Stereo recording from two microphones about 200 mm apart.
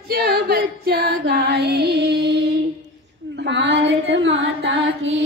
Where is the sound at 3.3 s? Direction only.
60° right (ahead or behind).